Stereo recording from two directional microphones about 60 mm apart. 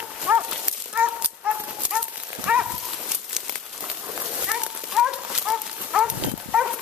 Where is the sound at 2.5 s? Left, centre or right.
Centre.